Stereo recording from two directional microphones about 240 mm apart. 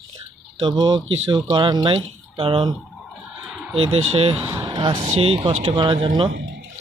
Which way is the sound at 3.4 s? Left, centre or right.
Centre.